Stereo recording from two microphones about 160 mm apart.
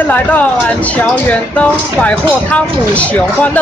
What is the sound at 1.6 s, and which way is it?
Speech, 10° left (ahead or behind).